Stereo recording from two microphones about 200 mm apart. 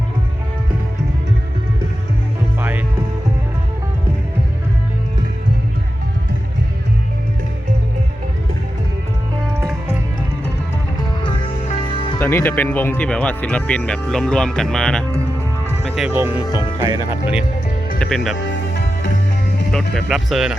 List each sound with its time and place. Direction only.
2.6 s music: 10° right (ahead or behind)
11.2 s music: 25° left (ahead or behind)
12.2 s speech: 10° left (ahead or behind); by 16.5 s 10° right (ahead or behind)
16.5 s speech: 20° left (ahead or behind)
16.7 s speech: 20° right (ahead or behind)
18.0 s speech: centre (ahead or behind)
19.7 s speech: centre (ahead or behind)